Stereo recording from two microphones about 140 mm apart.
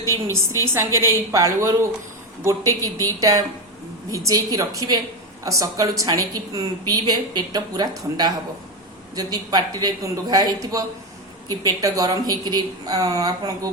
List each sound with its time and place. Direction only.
0.6 s a woman's voice: 20° right (ahead or behind)